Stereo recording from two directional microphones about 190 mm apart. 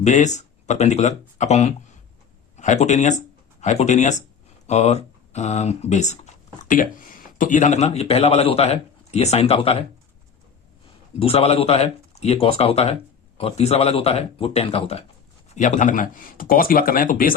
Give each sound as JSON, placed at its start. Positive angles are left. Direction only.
{"t": 0.0, "sound": "speech", "side_deg": 40}
{"t": 11.2, "sound": "speech", "side_deg": 30}